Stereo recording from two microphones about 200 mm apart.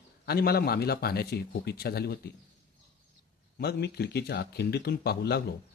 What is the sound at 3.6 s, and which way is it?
A man's voice, 55° left (ahead or behind).